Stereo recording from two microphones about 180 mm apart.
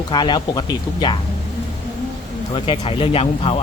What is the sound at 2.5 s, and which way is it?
Speech, 30° left (ahead or behind).